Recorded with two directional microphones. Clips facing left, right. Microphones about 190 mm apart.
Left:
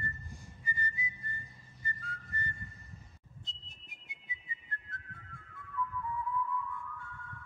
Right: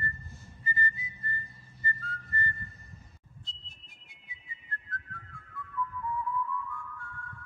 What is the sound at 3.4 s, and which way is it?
Whistle, 20° left (ahead or behind).